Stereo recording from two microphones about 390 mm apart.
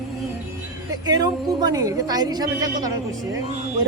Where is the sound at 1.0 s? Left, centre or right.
Centre.